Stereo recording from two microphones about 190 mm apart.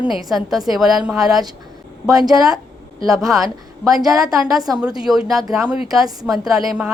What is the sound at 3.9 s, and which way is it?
A woman's voice, centre (ahead or behind).